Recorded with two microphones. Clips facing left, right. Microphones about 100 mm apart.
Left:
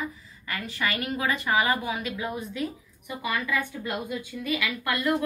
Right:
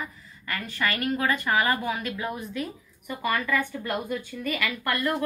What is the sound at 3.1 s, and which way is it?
A woman's voice, 10° left (ahead or behind).